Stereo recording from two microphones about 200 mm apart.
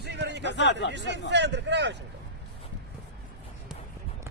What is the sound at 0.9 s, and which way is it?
Speech, 60° right (ahead or behind).